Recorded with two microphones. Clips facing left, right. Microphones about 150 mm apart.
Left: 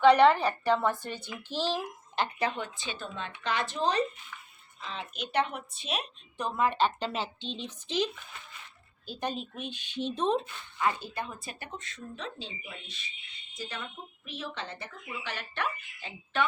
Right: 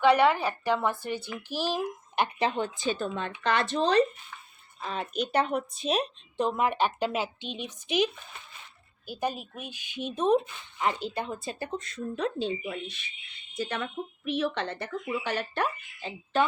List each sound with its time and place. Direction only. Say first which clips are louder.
0.0 s speech: left 2 dB; 5° right (ahead or behind)
2.8 s speech: right 8 dB; 45° right (ahead or behind); by 4.0 s 75° right (ahead or behind)
4.8 s speech: right 7 dB; 50° right (ahead or behind)
6.3 s speech: right 2 dB; 20° right (ahead or behind)
11.8 s speech: right 10 dB; 45° right (ahead or behind)